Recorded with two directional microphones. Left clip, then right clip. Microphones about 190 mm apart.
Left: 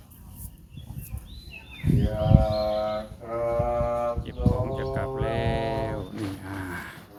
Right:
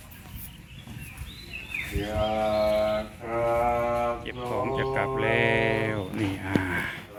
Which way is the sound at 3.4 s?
35° left (ahead or behind).